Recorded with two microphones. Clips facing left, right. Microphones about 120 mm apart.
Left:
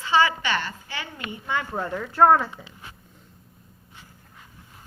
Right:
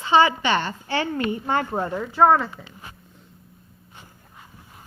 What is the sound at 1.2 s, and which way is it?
Speech, 45° right (ahead or behind).